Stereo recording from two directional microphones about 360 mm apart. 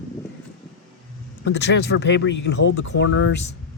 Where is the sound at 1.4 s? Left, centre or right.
Left.